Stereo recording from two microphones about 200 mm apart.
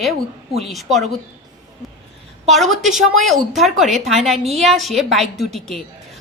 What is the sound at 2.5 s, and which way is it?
A woman's voice, centre (ahead or behind).